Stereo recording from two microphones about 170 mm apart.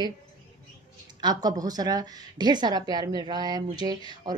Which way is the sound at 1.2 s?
25° right (ahead or behind).